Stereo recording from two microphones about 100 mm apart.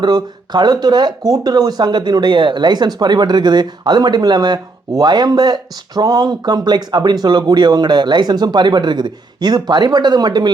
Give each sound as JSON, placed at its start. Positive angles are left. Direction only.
{"t": 0.0, "sound": "speech", "side_deg": -45}